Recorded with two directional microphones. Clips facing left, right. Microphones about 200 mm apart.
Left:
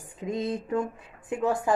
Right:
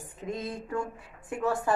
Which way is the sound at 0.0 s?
15° left (ahead or behind).